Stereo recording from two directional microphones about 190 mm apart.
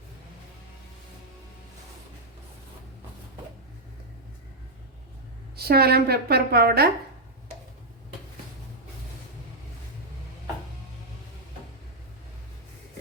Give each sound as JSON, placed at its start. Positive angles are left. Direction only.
{"t": 5.5, "sound": "a woman's voice", "side_deg": -55}